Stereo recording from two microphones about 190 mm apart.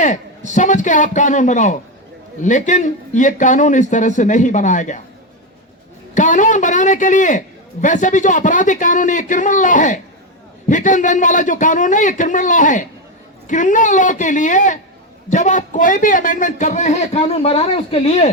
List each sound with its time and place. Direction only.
0.0 s a man's voice: 40° left (ahead or behind)
6.1 s a man's voice: 40° left (ahead or behind)